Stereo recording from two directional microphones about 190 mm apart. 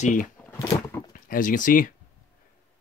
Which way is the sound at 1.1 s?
45° left (ahead or behind).